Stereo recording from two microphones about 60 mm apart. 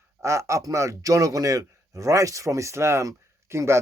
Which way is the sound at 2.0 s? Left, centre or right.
Right.